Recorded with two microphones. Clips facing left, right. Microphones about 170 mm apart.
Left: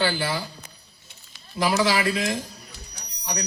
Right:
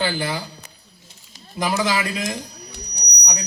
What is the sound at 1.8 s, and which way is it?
Speech, 20° right (ahead or behind).